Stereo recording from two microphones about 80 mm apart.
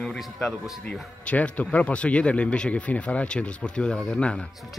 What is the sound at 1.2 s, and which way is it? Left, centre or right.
Speech, centre.